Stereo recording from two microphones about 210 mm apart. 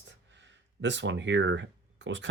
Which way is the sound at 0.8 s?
60° right (ahead or behind).